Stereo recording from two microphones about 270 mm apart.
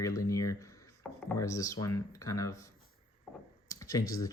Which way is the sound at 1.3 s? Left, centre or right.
Centre.